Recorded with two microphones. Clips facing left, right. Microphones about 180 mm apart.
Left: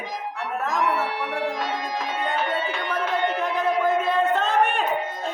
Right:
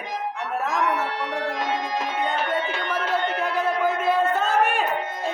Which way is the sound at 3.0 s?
15° left (ahead or behind).